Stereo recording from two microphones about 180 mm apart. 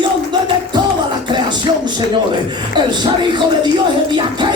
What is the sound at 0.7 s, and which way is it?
Music, 25° right (ahead or behind).